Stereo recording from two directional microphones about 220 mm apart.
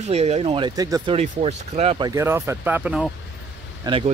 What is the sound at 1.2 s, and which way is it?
Speech, 30° right (ahead or behind).